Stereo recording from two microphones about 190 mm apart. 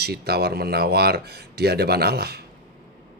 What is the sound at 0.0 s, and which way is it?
Speech, 55° right (ahead or behind).